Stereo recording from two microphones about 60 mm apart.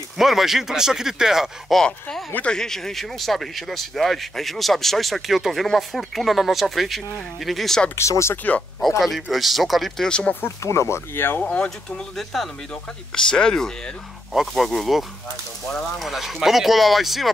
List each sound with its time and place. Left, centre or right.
0.2 s speech: centre
1.8 s speech: centre
7.9 s speech: left
9.0 s speech: centre
10.0 s speech: centre
10.6 s speech: left
11.3 s speech: left
12.2 s speech: centre
14.3 s speech: centre